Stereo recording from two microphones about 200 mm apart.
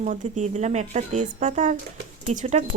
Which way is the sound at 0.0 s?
35° right (ahead or behind).